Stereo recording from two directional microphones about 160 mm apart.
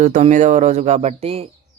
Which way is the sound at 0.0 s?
50° right (ahead or behind).